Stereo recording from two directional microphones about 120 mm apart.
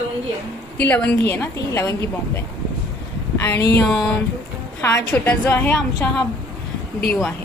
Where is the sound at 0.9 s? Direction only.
15° left (ahead or behind).